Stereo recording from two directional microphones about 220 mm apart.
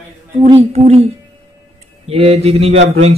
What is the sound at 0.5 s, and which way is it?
Speech, 25° right (ahead or behind).